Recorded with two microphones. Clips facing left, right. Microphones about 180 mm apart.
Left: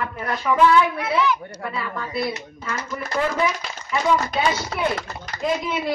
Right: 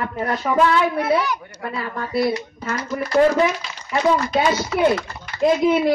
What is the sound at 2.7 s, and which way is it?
Speech, 35° right (ahead or behind).